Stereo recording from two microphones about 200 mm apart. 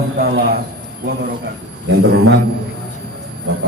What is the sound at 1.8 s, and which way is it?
Speech, 55° right (ahead or behind).